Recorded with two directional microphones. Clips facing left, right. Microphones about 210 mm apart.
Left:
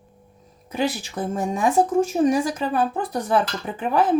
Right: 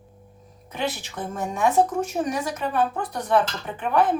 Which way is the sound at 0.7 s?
35° left (ahead or behind).